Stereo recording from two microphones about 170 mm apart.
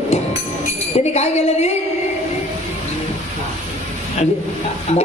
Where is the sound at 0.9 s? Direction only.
40° left (ahead or behind).